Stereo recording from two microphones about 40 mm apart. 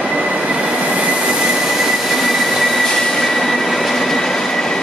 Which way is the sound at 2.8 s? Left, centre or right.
Centre.